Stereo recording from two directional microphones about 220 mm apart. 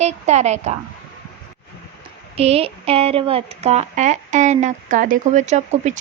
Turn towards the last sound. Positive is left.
turn(degrees=-30)  # may be behind; listen again after turning